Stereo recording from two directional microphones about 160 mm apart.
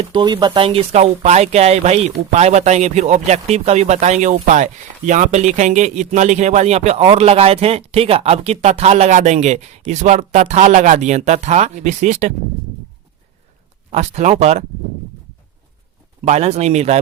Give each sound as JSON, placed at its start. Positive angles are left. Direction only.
{"t": 0.0, "sound": "speech", "side_deg": -30}
{"t": 13.9, "sound": "speech", "side_deg": -45}
{"t": 16.2, "sound": "speech", "side_deg": -45}